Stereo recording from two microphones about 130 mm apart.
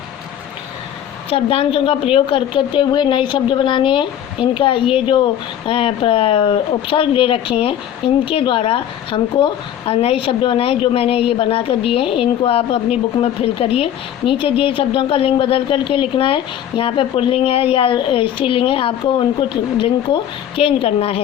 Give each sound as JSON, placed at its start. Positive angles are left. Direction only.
{"t": 1.3, "sound": "a woman's voice", "side_deg": 50}